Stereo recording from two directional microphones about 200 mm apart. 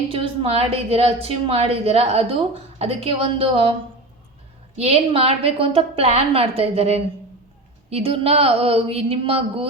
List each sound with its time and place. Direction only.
0.1 s a woman's voice: 30° right (ahead or behind)
4.8 s a woman's voice: 30° right (ahead or behind)